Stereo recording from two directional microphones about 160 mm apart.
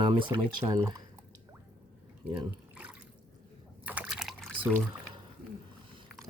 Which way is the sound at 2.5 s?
10° right (ahead or behind).